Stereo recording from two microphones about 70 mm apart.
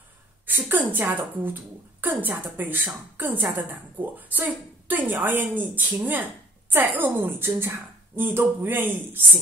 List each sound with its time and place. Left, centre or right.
0.5 s a woman's voice: right